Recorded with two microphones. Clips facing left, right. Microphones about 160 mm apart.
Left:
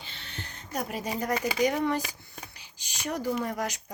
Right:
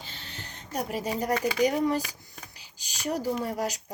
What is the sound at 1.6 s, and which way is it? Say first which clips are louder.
Speech: right 1 dB; 35° right (ahead or behind).